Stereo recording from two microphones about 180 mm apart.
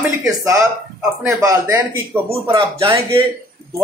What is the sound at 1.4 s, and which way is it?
Speech, 15° right (ahead or behind).